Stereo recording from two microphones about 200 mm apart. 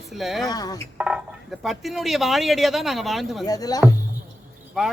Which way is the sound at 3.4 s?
20° left (ahead or behind).